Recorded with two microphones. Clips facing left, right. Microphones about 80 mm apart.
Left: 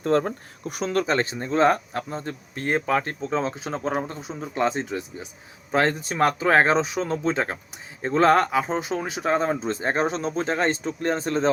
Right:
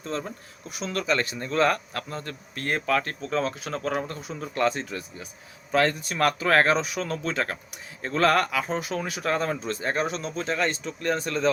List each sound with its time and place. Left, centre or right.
0.0 s speech: left